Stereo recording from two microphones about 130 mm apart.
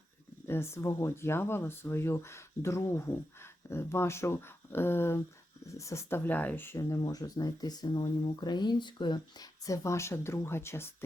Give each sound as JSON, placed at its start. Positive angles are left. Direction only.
{"t": 0.4, "sound": "speech", "side_deg": 20}